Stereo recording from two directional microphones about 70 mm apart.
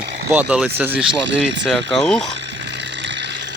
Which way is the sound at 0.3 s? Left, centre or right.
Centre.